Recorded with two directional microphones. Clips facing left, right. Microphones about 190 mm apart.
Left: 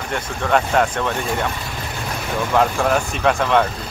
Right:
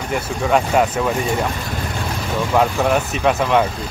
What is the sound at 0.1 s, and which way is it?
Speech, 5° right (ahead or behind).